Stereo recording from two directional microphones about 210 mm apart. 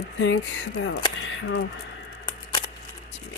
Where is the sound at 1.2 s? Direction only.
60° left (ahead or behind).